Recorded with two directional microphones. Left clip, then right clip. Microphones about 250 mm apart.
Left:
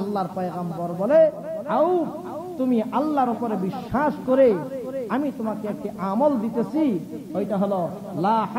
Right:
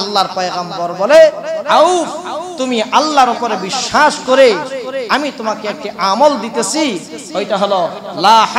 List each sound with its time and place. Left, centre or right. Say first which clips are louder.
0.0 s a man's voice: right 12 dB; centre
0.6 s a man's voice: right 11 dB; centre
1.1 s speech: right 10 dB; centre